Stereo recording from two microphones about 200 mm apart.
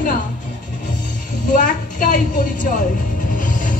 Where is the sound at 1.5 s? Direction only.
40° left (ahead or behind).